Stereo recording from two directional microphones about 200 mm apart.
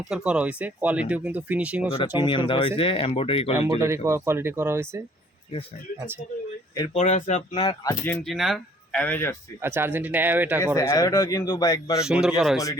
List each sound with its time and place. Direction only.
0.1 s speech: 5° right (ahead or behind)
1.9 s speech: 25° left (ahead or behind)
3.5 s speech: 15° right (ahead or behind)
6.9 s speech: 35° left (ahead or behind)
8.0 s speech: 5° left (ahead or behind)
9.6 s speech: 10° right (ahead or behind)
10.8 s speech: 20° left (ahead or behind)
12.0 s speech: 5° right (ahead or behind)